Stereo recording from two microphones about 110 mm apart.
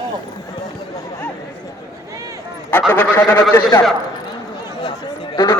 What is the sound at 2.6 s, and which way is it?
Speech, 15° left (ahead or behind).